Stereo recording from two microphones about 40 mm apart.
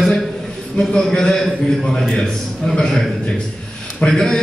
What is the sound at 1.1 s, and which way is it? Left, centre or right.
Speech, centre.